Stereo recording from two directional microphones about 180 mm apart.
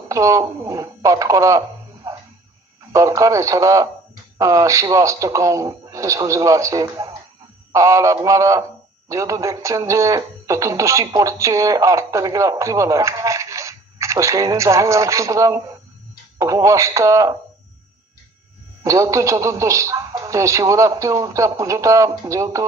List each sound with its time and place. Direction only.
0.1 s speech: 20° right (ahead or behind)
2.0 s music: 15° right (ahead or behind)
2.9 s speech: 20° right (ahead or behind)
18.9 s speech: 15° right (ahead or behind)